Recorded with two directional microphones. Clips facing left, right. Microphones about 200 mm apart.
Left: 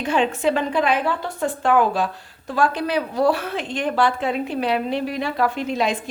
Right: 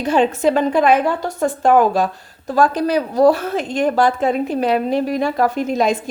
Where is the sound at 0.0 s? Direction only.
40° right (ahead or behind).